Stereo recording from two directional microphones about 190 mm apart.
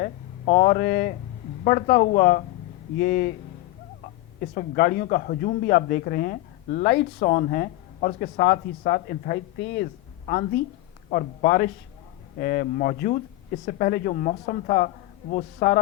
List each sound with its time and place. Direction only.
0.0 s a man's voice: 45° left (ahead or behind)
4.4 s a man's voice: 50° left (ahead or behind); by 9.9 s 65° left (ahead or behind)
10.2 s a man's voice: 45° left (ahead or behind)